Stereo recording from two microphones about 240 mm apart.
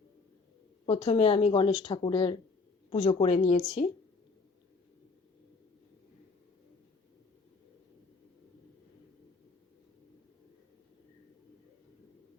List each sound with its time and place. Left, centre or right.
0.9 s a woman's voice: left